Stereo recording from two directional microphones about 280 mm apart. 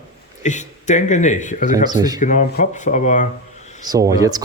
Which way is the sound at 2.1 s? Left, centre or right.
Left.